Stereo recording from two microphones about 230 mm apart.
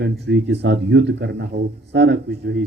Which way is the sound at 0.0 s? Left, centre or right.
Right.